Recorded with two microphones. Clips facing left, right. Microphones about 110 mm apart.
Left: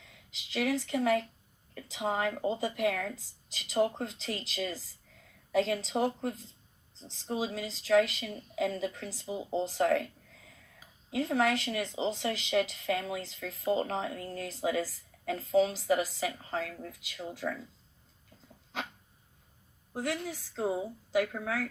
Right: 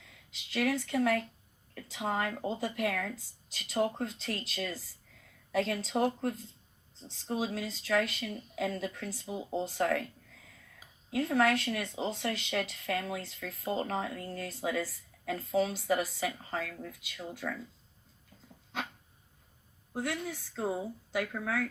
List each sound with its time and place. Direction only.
0.3 s a sound: 90° left
0.6 s a woman's voice: 5° left (ahead or behind)
19.9 s speech: centre (ahead or behind)